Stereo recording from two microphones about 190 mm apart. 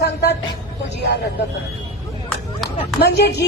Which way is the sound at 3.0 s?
60° left (ahead or behind).